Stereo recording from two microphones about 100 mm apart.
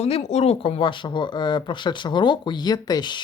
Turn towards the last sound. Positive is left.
turn(degrees=45)  # may be behind; listen again after turning